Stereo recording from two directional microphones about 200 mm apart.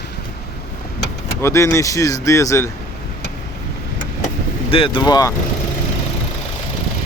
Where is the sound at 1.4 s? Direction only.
15° left (ahead or behind).